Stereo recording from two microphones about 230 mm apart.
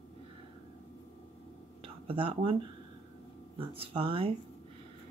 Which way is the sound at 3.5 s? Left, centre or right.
Right.